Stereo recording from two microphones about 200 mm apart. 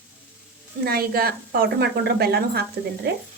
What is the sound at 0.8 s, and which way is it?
A woman's voice, 50° right (ahead or behind).